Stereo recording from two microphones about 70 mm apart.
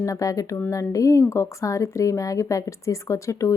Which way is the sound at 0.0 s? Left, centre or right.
Left.